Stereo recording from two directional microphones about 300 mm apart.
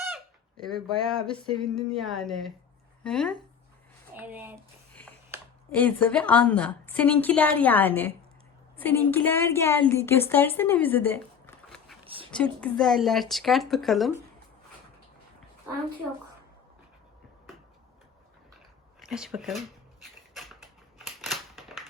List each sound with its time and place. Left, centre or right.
0.0 s fowl: centre
1.6 s a woman's voice: centre
5.7 s a woman's voice: centre
12.0 s a sound: centre
12.3 s a woman's voice: centre
19.0 s a woman's voice: centre
21.0 s scissors: centre